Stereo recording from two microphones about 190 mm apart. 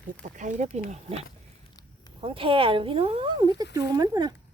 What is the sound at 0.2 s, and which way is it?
Speech, 40° right (ahead or behind).